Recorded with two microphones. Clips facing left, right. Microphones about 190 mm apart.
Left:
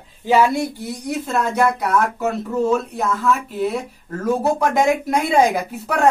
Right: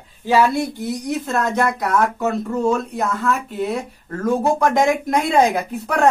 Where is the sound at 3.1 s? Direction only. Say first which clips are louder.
Left 1 dB; 5° left (ahead or behind).